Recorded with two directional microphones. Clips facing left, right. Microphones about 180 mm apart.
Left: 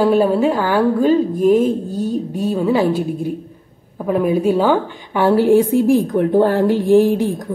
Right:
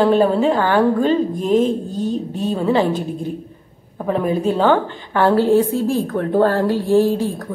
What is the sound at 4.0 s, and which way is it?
A woman's voice, 5° left (ahead or behind).